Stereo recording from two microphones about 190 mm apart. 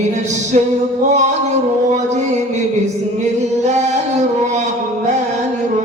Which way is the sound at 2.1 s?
35° right (ahead or behind).